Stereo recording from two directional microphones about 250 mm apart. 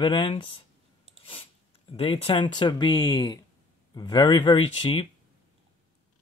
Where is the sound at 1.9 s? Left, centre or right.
Left.